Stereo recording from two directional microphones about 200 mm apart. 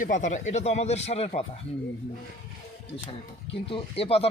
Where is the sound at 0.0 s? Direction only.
40° left (ahead or behind).